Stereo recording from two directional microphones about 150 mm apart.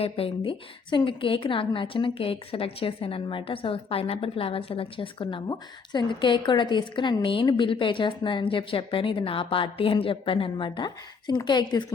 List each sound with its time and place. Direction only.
0.0 s a woman's voice: 35° left (ahead or behind)